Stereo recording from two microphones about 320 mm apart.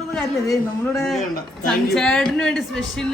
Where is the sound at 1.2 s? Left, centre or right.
Left.